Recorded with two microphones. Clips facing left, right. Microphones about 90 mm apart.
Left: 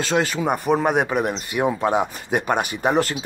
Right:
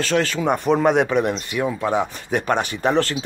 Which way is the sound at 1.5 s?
25° left (ahead or behind).